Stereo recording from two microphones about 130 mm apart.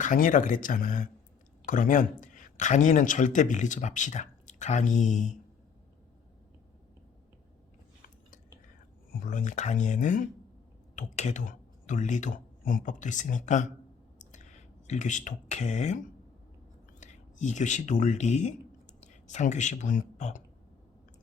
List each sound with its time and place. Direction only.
0.0 s speech: 85° left; by 5.3 s 70° left (ahead or behind)
9.3 s speech: 75° left (ahead or behind)
14.8 s speech: 70° left (ahead or behind)
17.0 s speech: 65° left (ahead or behind)